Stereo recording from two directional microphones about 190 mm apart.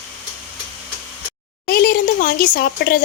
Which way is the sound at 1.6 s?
55° left (ahead or behind).